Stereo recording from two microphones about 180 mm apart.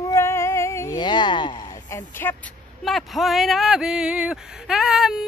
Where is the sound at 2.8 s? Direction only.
Centre (ahead or behind).